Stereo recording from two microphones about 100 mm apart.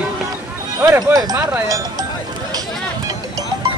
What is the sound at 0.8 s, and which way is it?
Speech, 30° right (ahead or behind).